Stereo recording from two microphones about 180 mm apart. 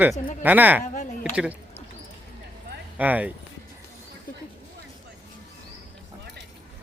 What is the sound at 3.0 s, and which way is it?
Speech, 10° right (ahead or behind).